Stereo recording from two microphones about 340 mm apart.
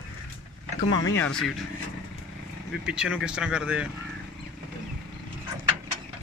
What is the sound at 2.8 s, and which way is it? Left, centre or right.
Speech, centre.